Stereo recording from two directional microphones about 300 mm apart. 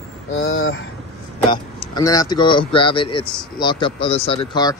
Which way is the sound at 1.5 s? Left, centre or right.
Centre.